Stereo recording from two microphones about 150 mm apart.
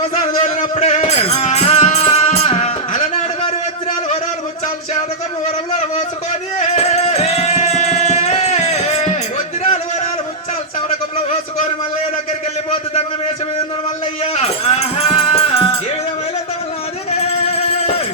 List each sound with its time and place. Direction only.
0.8 s music: 45° left (ahead or behind)
6.6 s music: 45° left (ahead or behind)
9.6 s a sound: 50° left (ahead or behind)
14.3 s music: 45° left (ahead or behind)
17.1 s music: 45° left (ahead or behind)